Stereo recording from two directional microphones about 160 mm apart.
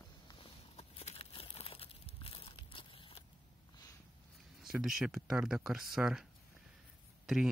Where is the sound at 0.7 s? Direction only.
40° left (ahead or behind).